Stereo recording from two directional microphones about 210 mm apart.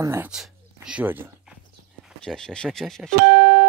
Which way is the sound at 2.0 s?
5° left (ahead or behind).